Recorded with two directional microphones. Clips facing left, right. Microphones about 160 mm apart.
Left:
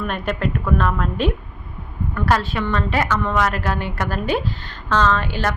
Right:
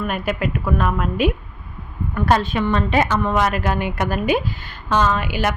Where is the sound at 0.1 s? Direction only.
5° right (ahead or behind).